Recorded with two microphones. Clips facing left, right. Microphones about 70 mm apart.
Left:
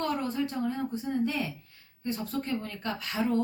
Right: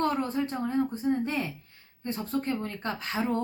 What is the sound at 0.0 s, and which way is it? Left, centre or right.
A woman's voice, right.